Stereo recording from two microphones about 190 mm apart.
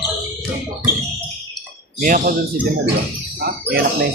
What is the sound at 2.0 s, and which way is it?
Speech, 45° right (ahead or behind).